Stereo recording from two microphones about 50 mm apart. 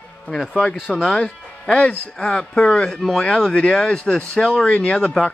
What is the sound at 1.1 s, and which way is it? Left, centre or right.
Speech, left.